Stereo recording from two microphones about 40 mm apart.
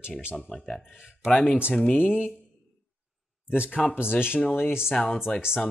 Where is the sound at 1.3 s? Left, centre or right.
Left.